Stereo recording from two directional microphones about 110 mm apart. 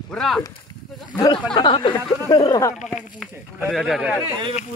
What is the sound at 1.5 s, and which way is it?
Speech, 50° left (ahead or behind).